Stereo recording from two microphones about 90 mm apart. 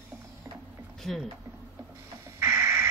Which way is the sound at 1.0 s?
Centre (ahead or behind).